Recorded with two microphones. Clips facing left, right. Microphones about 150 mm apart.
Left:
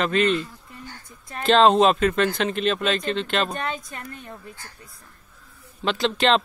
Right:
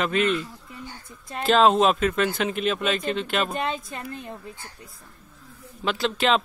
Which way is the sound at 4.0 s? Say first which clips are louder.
Right 3 dB; 25° right (ahead or behind).